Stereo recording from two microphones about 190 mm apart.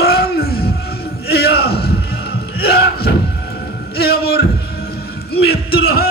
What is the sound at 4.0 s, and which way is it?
Speech, 55° left (ahead or behind).